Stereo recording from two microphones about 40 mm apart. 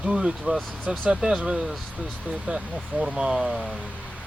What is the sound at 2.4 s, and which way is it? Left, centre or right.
Speech, centre.